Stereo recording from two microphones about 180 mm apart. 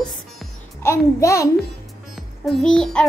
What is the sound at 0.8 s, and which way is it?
Speech, 15° left (ahead or behind).